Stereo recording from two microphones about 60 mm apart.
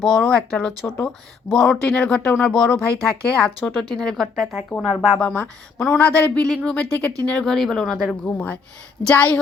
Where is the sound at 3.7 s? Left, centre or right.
Centre.